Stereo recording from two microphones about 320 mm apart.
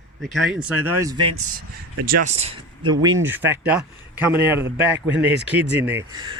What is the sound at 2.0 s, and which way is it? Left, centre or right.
A man's voice, right.